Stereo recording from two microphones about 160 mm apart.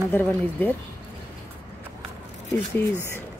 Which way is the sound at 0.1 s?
10° left (ahead or behind).